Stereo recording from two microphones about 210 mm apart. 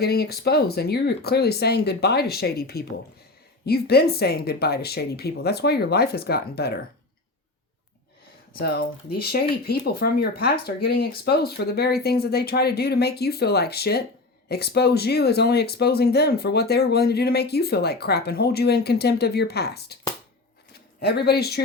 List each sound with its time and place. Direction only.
0.0 s speech: 50° left (ahead or behind)
8.5 s speech: 45° left (ahead or behind)